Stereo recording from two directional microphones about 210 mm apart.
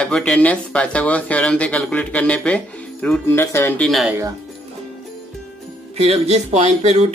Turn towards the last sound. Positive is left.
turn(degrees=-30)  # may be behind; listen again after turning